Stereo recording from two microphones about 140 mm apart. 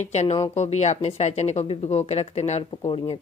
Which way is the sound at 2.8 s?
35° left (ahead or behind).